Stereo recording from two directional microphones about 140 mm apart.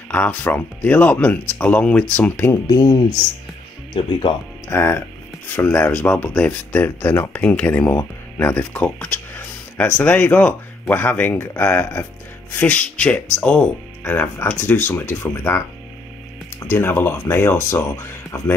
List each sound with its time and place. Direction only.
0.1 s speech: 10° left (ahead or behind)
2.6 s speech: 30° left (ahead or behind)
3.9 s speech: 40° left (ahead or behind)
4.6 s speech: 15° left (ahead or behind)